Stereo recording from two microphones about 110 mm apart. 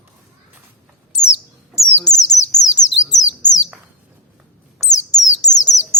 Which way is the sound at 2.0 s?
35° left (ahead or behind).